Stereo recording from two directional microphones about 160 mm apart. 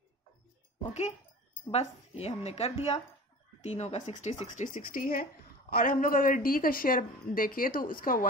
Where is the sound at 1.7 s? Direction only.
40° left (ahead or behind).